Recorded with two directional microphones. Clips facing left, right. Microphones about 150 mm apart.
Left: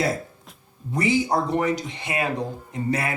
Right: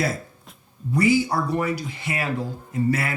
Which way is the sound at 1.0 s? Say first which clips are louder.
Right 1 dB; 20° left (ahead or behind).